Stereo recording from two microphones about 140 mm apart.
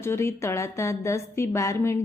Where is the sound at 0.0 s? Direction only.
20° left (ahead or behind).